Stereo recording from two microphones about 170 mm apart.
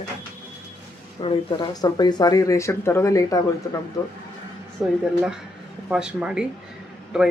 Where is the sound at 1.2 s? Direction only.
30° left (ahead or behind).